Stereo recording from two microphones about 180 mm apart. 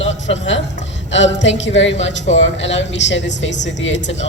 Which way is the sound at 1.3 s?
90° left.